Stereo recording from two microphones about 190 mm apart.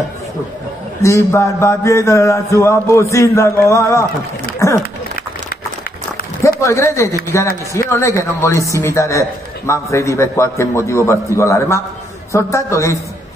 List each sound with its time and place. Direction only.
1.0 s mantra: 15° left (ahead or behind)
6.4 s speech: 15° left (ahead or behind)
7.7 s mantra: 15° left (ahead or behind)